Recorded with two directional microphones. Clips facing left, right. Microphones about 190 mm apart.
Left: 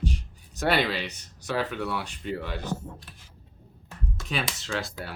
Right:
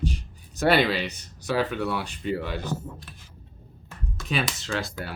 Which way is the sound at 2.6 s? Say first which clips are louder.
Right 1 dB; 30° left (ahead or behind).